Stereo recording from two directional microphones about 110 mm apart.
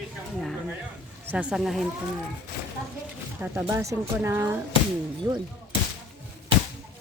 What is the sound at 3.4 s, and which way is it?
Speech, 15° right (ahead or behind).